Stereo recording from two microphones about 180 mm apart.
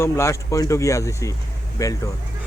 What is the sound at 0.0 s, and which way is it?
A man's voice, 15° left (ahead or behind).